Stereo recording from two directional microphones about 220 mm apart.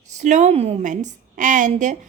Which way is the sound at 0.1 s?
35° right (ahead or behind).